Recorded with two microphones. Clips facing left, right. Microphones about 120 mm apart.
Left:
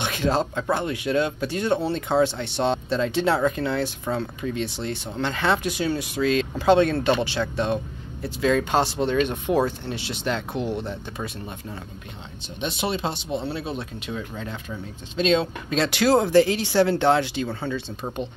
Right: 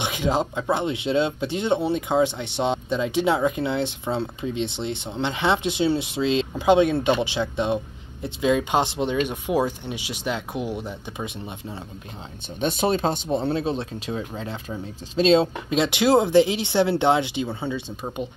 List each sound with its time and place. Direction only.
0.0 s speech: 15° right (ahead or behind)
12.5 s speech: 40° right (ahead or behind)
15.4 s speech: 20° right (ahead or behind)